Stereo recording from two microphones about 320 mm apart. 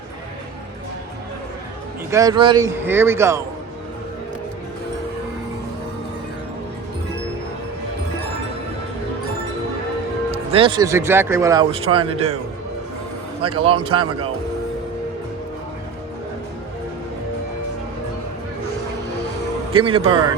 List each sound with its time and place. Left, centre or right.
2.0 s speech: centre
10.3 s speech: centre
13.4 s speech: centre
19.7 s speech: centre